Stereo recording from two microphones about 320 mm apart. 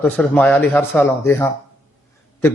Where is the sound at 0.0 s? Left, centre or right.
Centre.